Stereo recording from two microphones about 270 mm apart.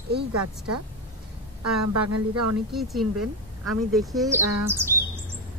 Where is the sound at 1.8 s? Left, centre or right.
Right.